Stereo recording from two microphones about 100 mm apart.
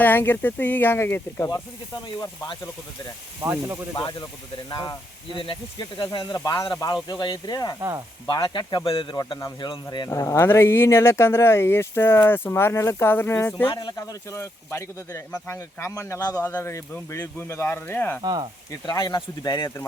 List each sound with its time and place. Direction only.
0.0 s speech: 20° left (ahead or behind)
3.4 s speech: 25° right (ahead or behind)
3.9 s speech: 45° left (ahead or behind)
6.3 s speech: 40° left (ahead or behind)
7.8 s frying: 30° right (ahead or behind)
8.3 s speech: 45° left (ahead or behind)
8.9 s a man's voice: 65° left (ahead or behind)
10.1 s speech: 30° left (ahead or behind)
13.7 s speech: 35° left (ahead or behind)
16.4 s speech: 20° left (ahead or behind)
18.2 s speech: 45° right (ahead or behind)
18.9 s speech: 40° left (ahead or behind)